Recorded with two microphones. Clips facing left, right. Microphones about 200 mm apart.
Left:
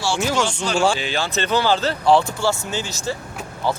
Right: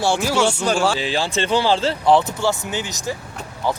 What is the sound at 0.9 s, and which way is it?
Speech, 30° right (ahead or behind).